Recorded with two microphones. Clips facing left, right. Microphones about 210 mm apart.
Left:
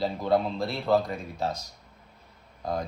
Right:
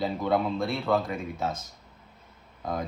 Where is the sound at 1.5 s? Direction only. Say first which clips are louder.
Even; 50° right (ahead or behind).